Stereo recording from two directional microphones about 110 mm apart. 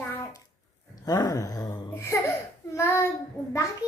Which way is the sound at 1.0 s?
35° left (ahead or behind).